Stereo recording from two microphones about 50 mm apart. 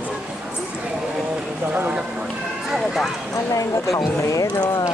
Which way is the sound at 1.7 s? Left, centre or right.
Right.